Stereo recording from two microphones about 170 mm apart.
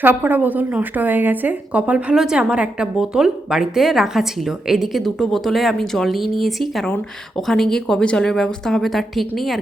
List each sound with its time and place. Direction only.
0.0 s a woman's voice: 10° right (ahead or behind)